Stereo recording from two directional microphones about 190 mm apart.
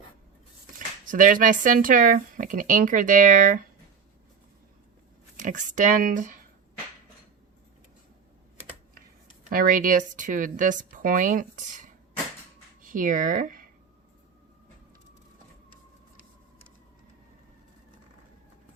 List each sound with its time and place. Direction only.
1.0 s speech: 45° right (ahead or behind)
5.4 s speech: 40° right (ahead or behind)
9.5 s speech: 45° right (ahead or behind)